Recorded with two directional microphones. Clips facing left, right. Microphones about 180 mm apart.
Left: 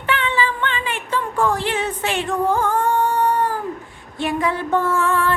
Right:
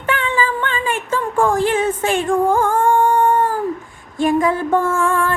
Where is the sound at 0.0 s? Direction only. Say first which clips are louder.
Right 2 dB; 45° right (ahead or behind).